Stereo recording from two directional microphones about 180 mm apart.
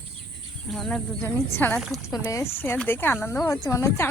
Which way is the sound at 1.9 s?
Centre (ahead or behind).